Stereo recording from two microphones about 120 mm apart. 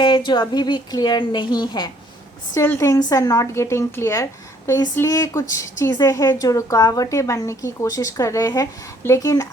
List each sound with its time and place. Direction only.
0.0 s a woman's voice: 40° left (ahead or behind)
2.6 s speech: 25° left (ahead or behind)